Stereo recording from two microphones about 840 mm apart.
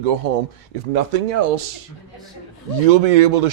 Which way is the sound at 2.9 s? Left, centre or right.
Right.